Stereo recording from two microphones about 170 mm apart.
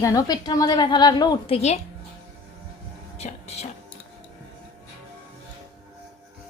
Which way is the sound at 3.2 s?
40° left (ahead or behind).